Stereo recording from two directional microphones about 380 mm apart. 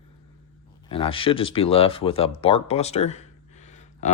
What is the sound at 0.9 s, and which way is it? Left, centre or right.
Speech, centre.